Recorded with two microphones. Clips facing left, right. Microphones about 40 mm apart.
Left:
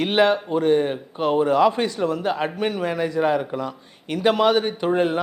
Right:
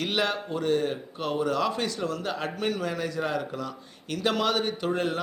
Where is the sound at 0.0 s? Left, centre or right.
Left.